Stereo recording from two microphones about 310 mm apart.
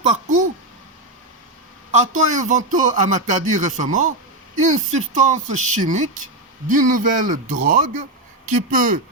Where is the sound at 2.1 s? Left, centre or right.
Right.